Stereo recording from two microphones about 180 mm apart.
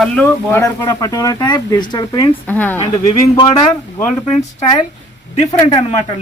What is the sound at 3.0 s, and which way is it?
Speech, 25° left (ahead or behind).